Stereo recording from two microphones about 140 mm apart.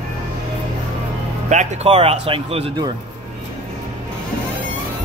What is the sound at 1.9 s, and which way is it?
Speech, 45° right (ahead or behind).